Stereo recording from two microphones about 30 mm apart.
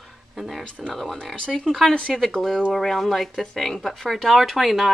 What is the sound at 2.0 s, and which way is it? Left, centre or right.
Speech, left.